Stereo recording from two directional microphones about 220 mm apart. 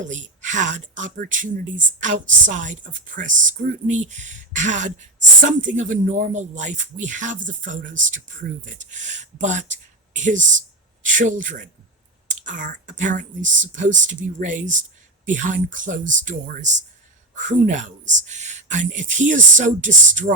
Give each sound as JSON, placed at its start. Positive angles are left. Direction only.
{"t": 0.0, "sound": "speech", "side_deg": -35}